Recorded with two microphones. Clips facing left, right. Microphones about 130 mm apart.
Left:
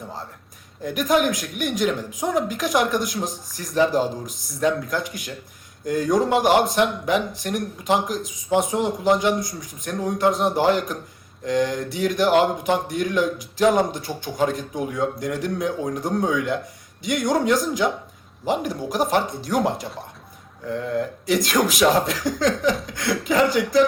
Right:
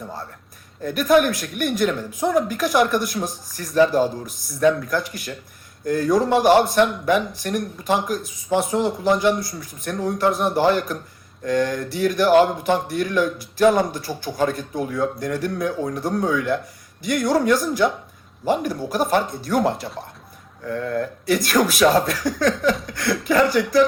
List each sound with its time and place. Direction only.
0.9 s speech: 20° left (ahead or behind)